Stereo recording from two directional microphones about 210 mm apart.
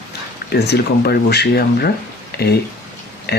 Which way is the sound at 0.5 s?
50° left (ahead or behind).